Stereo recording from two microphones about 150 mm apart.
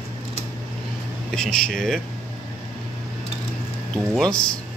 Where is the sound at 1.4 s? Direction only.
5° left (ahead or behind).